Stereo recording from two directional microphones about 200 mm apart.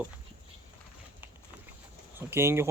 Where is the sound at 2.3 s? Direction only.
10° right (ahead or behind).